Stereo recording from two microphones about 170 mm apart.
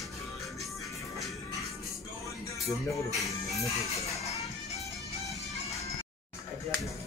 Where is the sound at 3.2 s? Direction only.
20° left (ahead or behind).